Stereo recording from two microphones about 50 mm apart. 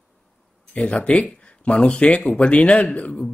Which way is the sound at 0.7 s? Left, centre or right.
Left.